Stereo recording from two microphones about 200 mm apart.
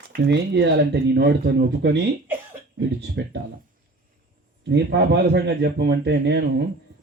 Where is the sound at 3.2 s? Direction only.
60° right (ahead or behind).